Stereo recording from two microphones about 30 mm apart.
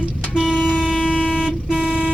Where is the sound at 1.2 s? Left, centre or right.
Left.